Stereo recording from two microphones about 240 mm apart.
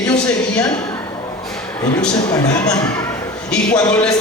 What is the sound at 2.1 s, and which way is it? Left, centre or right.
A man's voice, centre.